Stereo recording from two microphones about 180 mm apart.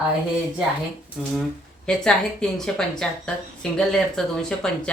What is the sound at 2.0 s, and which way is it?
Speech, 5° left (ahead or behind).